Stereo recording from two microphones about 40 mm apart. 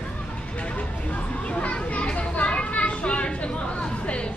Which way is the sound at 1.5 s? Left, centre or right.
Left.